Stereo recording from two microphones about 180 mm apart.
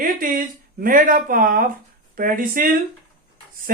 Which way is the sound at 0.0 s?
50° right (ahead or behind).